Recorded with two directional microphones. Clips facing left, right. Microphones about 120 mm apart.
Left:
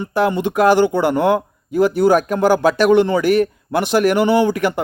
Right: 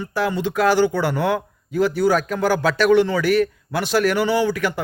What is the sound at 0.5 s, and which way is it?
Speech, 50° left (ahead or behind).